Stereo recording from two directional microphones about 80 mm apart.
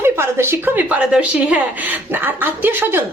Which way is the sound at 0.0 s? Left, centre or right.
Right.